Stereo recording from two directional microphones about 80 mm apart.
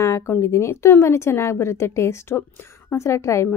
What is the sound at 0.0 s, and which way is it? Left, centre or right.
A woman's voice, left.